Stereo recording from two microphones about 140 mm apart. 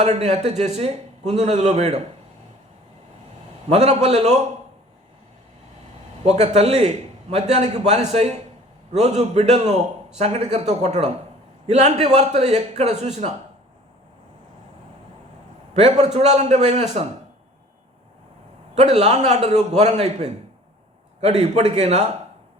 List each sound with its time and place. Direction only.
0.0 s a man's voice: 50° right (ahead or behind)
3.7 s a man's voice: 45° right (ahead or behind)
6.2 s a man's voice: 50° right (ahead or behind)
15.7 s a man's voice: 50° right (ahead or behind)
18.7 s a man's voice: 50° right (ahead or behind)